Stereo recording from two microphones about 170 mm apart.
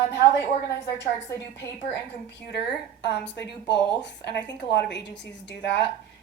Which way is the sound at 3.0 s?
90° left.